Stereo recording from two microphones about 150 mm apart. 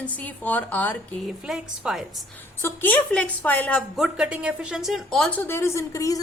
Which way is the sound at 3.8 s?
5° right (ahead or behind).